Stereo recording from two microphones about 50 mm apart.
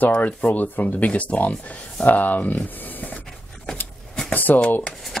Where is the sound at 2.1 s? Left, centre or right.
Left.